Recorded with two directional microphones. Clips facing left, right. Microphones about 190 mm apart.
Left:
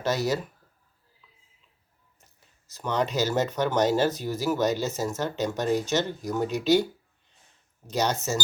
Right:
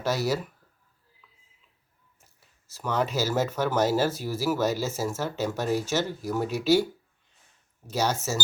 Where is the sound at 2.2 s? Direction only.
5° right (ahead or behind).